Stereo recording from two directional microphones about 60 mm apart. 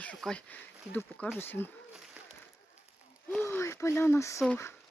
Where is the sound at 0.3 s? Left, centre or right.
Left.